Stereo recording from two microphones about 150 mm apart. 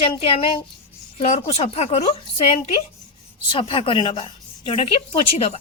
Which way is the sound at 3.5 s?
35° left (ahead or behind).